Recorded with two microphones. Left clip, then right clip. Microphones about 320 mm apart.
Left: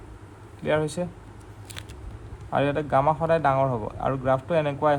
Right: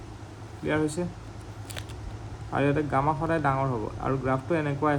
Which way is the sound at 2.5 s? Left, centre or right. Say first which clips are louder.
Left 3 dB; left.